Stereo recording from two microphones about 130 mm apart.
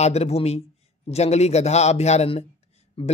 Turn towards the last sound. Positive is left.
turn(degrees=45)  # may be behind; listen again after turning